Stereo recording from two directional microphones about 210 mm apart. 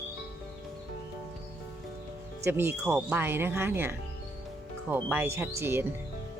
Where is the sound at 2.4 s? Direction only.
10° right (ahead or behind).